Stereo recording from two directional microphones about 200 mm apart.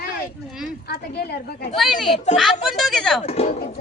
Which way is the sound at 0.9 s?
55° left (ahead or behind).